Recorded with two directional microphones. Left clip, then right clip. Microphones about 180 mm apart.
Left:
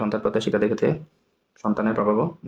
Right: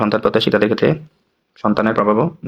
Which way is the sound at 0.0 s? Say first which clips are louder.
Right 8 dB; 25° right (ahead or behind).